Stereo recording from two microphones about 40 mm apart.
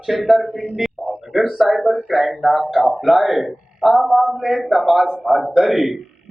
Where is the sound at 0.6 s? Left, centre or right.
Centre.